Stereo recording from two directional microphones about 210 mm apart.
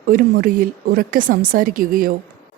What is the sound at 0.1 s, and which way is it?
Speech, 45° right (ahead or behind).